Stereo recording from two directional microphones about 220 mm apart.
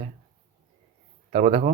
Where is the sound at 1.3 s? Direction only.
30° right (ahead or behind).